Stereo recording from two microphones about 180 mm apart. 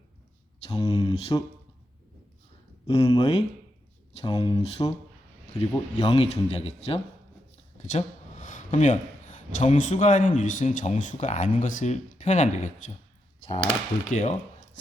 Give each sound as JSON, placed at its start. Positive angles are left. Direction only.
{"t": 0.7, "sound": "speech", "side_deg": 20}
{"t": 2.8, "sound": "speech", "side_deg": 35}
{"t": 5.5, "sound": "speech", "side_deg": 35}
{"t": 14.1, "sound": "speech", "side_deg": 40}